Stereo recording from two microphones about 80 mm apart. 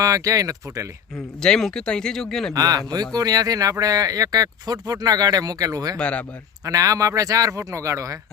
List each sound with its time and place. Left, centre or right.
0.0 s speech: right
1.4 s speech: centre
2.5 s speech: right
6.0 s speech: centre
6.7 s speech: right